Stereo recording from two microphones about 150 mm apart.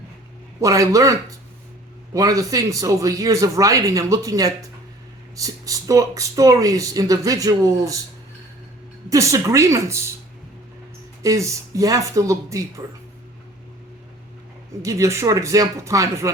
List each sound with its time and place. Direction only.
0.6 s speech: 20° right (ahead or behind)
9.0 s speech: 20° right (ahead or behind)
11.2 s speech: 20° right (ahead or behind)
14.8 s speech: 20° right (ahead or behind)